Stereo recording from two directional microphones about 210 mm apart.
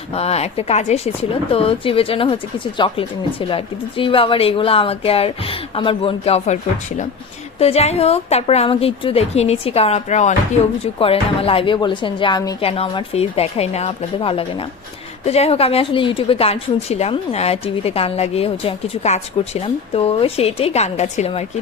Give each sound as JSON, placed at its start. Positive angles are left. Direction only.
{"t": 0.1, "sound": "a woman's voice", "side_deg": 30}